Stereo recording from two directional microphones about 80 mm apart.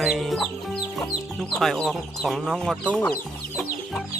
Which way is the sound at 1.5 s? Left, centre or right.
Centre.